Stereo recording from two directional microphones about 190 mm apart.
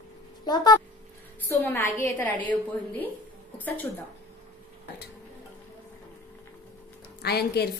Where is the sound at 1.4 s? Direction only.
10° left (ahead or behind).